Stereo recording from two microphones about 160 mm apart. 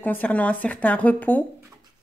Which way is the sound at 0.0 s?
10° left (ahead or behind).